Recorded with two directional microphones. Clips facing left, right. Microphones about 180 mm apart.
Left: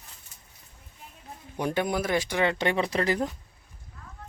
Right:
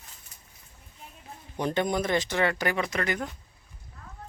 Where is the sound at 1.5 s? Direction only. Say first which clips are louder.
Even; 10° left (ahead or behind); by 3.3 s 30° left (ahead or behind).